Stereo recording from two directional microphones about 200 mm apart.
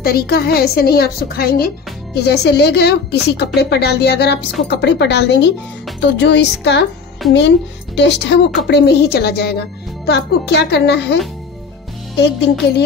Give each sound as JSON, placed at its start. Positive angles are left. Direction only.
{"t": 0.0, "sound": "a woman's voice", "side_deg": 50}
{"t": 12.2, "sound": "a woman's voice", "side_deg": 55}